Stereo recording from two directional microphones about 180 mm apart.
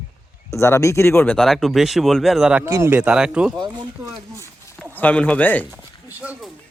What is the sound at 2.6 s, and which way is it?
Speech, 15° right (ahead or behind).